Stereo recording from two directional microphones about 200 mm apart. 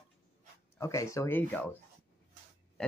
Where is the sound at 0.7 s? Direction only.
15° left (ahead or behind).